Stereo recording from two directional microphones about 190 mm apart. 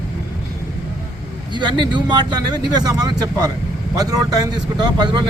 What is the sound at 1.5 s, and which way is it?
Speech, 25° right (ahead or behind).